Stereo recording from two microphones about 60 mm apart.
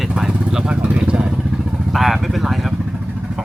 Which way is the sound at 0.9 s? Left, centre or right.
Right.